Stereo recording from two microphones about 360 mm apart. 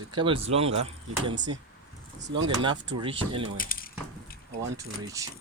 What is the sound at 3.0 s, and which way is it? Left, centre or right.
Speech, centre.